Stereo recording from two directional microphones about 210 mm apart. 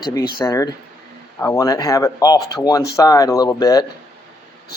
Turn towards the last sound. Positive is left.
turn(degrees=15)  # may be behind; listen again after turning